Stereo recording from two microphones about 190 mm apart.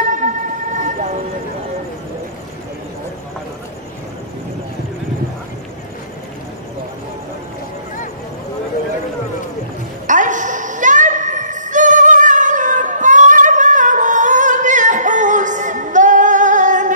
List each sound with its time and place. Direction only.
0.1 s vehicle: 40° right (ahead or behind)
10.0 s music: 40° right (ahead or behind)